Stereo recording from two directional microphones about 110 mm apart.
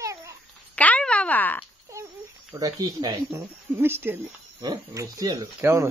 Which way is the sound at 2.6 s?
35° right (ahead or behind).